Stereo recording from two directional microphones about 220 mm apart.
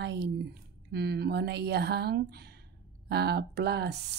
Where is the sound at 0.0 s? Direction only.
50° right (ahead or behind).